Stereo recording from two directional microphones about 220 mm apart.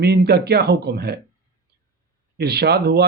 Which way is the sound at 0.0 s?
45° right (ahead or behind).